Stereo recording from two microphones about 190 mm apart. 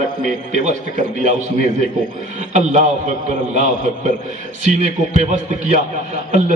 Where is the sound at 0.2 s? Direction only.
40° right (ahead or behind).